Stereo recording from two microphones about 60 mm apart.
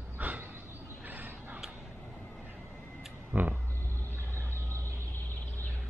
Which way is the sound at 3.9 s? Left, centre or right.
Right.